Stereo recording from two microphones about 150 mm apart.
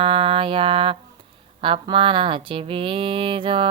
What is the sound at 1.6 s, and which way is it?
Speech, 35° right (ahead or behind).